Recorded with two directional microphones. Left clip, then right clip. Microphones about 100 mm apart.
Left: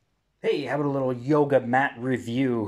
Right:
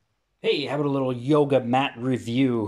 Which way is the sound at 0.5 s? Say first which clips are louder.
Right 1 dB; 15° right (ahead or behind).